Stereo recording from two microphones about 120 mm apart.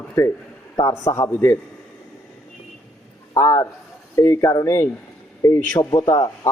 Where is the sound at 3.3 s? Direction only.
25° left (ahead or behind).